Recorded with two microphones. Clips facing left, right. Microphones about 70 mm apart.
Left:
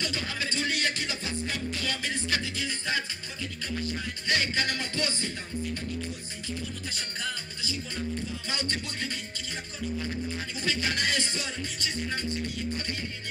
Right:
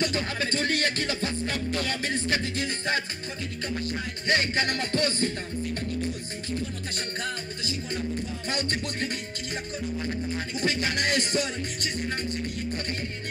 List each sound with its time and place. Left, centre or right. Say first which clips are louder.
0.0 s music: right 5 dB; right
4.3 s music: right 3 dB; right
7.0 s music: right 4 dB; right
11.0 s music: right 4 dB; right